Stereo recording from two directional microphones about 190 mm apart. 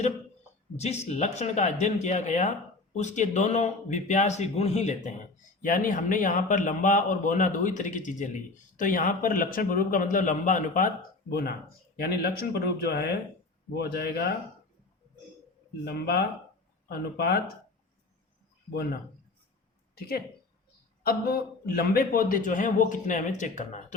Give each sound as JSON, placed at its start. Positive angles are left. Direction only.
{"t": 0.8, "sound": "speech", "side_deg": 35}
{"t": 15.8, "sound": "speech", "side_deg": 60}
{"t": 21.0, "sound": "speech", "side_deg": 55}